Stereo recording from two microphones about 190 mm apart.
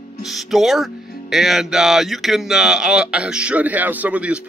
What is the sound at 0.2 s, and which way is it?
Speech, centre (ahead or behind).